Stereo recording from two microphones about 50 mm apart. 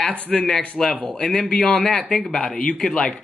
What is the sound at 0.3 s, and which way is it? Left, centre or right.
Speech, centre.